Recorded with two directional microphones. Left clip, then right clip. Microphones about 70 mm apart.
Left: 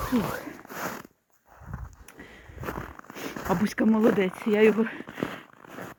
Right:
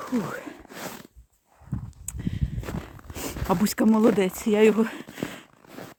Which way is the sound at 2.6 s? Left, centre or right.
Centre.